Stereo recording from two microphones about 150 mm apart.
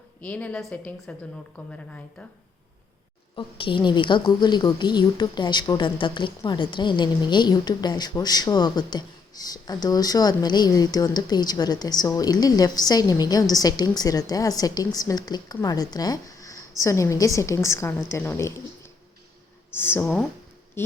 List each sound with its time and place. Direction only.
0.2 s a woman's voice: 10° left (ahead or behind)
3.3 s a woman's voice: 35° left (ahead or behind); by 18.5 s 20° left (ahead or behind)
19.7 s a woman's voice: 15° left (ahead or behind)